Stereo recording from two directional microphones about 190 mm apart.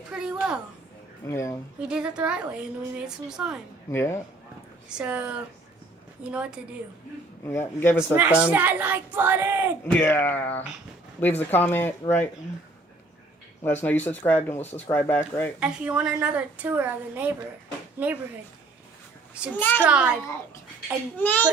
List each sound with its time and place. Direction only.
0.1 s a woman's voice: 5° right (ahead or behind)
1.3 s speech: 15° left (ahead or behind)
1.9 s a woman's voice: 5° right (ahead or behind)
3.9 s speech: 15° left (ahead or behind)
4.9 s a woman's voice: 5° right (ahead or behind)
7.4 s speech: 15° left (ahead or behind)
8.1 s a woman's voice: 10° right (ahead or behind)
9.8 s speech: 10° left (ahead or behind)
13.6 s speech: 10° left (ahead or behind)
15.6 s a woman's voice: 5° right (ahead or behind)
19.5 s speech: 10° left (ahead or behind)
19.8 s a woman's voice: 5° right (ahead or behind)
21.2 s speech: 10° left (ahead or behind)